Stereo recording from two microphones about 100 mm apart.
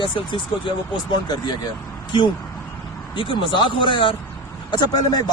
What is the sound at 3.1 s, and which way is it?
Speech, 60° left (ahead or behind).